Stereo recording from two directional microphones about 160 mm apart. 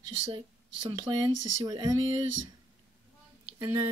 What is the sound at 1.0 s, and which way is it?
Speech, 25° right (ahead or behind).